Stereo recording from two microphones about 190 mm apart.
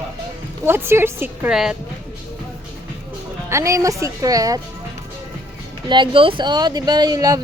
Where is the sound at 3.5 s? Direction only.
15° right (ahead or behind).